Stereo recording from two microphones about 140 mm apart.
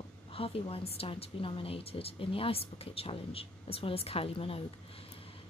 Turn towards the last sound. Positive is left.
turn(degrees=45)  # may be behind; listen again after turning